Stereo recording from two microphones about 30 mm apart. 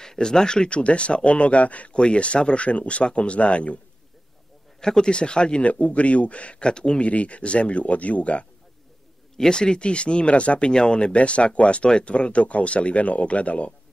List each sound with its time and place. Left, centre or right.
0.0 s speech: left
0.7 s speech: left
2.0 s speech: left
4.7 s speech: centre
5.1 s speech: left
5.6 s speech: left
6.6 s speech: left
7.0 s speech: left
9.5 s speech: left
10.7 s speech: left
11.1 s speech: left